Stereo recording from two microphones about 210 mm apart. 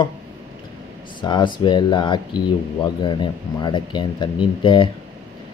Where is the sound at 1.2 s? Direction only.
20° left (ahead or behind).